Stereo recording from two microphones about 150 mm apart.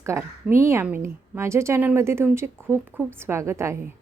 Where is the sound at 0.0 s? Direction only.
20° right (ahead or behind).